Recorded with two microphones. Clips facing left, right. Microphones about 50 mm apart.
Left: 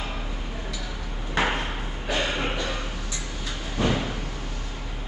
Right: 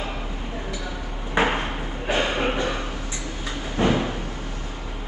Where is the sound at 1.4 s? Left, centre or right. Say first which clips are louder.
Right 3 dB; right.